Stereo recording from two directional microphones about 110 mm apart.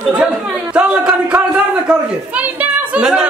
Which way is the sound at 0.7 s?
10° right (ahead or behind).